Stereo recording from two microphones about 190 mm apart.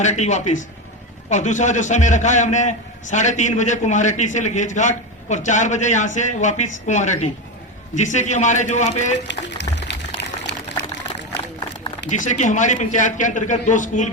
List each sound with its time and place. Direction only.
0.0 s a man's voice: 40° left (ahead or behind)
9.2 s speech: 65° left (ahead or behind)
10.5 s a sound: 65° left (ahead or behind)
12.0 s a man's voice: 40° left (ahead or behind)